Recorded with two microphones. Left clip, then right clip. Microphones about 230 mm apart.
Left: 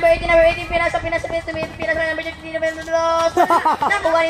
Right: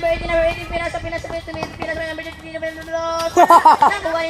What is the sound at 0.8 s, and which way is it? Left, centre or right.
Speech, left.